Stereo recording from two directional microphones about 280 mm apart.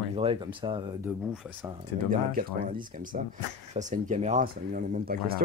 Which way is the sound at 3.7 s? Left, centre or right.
Right.